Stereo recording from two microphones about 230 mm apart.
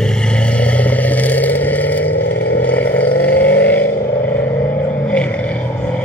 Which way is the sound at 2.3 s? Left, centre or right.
Left.